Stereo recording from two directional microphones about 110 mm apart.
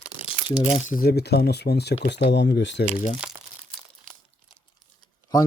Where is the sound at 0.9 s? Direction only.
90° left.